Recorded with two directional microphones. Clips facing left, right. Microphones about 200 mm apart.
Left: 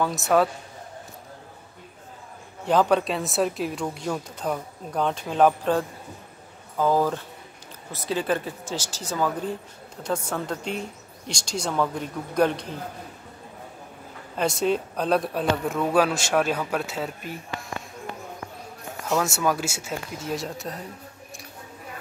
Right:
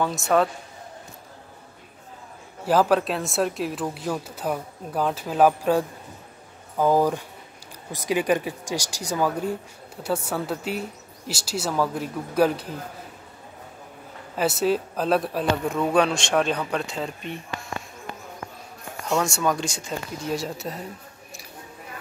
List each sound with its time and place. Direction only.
0.0 s speech: centre (ahead or behind)
2.6 s speech: 5° right (ahead or behind)
14.3 s speech: 5° right (ahead or behind)
19.0 s speech: 5° left (ahead or behind)